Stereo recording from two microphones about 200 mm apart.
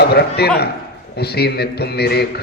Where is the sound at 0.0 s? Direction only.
55° left (ahead or behind).